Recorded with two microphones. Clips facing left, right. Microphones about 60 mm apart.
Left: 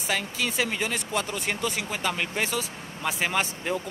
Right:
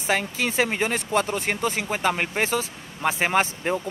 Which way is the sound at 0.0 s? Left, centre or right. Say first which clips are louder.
Right 4 dB; right.